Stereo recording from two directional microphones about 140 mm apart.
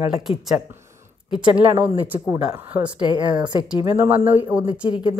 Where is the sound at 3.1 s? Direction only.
35° right (ahead or behind).